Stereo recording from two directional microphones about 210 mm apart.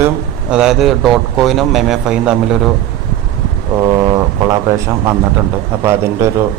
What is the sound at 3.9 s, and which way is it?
Speech, 20° right (ahead or behind).